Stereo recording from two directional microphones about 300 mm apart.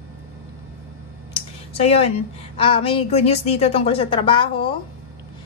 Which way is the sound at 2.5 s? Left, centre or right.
Centre.